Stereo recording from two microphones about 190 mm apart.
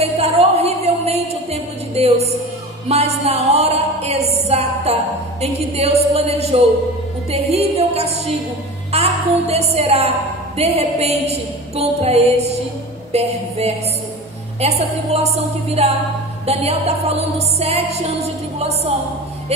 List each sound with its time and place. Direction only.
0.0 s music: 35° right (ahead or behind)
8.9 s a woman's voice: 35° right (ahead or behind)
10.6 s music: 35° right (ahead or behind)